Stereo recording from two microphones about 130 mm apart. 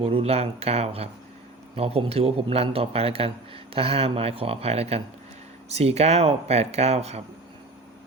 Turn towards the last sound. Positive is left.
turn(degrees=-55)  # may be behind; listen again after turning